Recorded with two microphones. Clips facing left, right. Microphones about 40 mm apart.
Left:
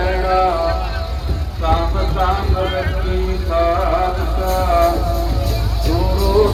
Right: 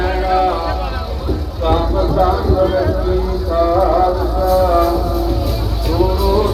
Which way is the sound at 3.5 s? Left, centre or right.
Left.